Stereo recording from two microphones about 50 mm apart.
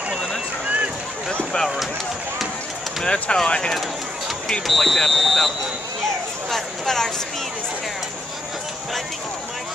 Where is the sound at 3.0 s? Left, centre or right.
Left.